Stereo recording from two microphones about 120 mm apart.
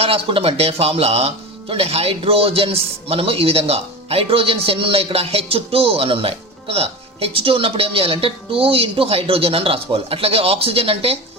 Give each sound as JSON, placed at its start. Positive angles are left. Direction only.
{"t": 0.0, "sound": "speech", "side_deg": -50}